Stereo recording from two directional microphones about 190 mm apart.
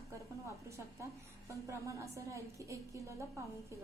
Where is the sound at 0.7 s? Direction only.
15° right (ahead or behind).